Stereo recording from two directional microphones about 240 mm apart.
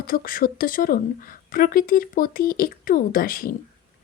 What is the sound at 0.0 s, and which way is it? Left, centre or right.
A woman's voice, left.